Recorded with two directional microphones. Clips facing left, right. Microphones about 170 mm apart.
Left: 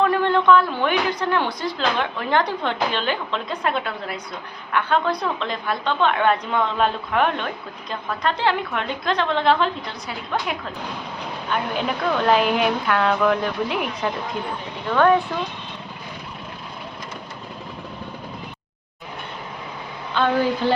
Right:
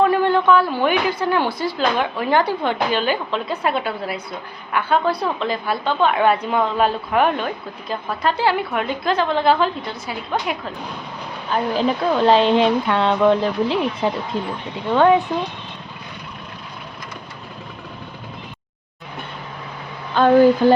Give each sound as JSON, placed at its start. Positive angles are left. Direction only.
{"t": 0.0, "sound": "a woman's voice", "side_deg": -5}
{"t": 11.5, "sound": "a woman's voice", "side_deg": -30}
{"t": 14.8, "sound": "a woman's voice", "side_deg": -20}
{"t": 20.1, "sound": "a woman's voice", "side_deg": -45}